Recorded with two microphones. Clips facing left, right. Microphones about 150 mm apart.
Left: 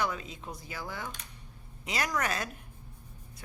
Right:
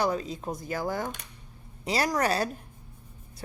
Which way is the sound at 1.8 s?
35° right (ahead or behind).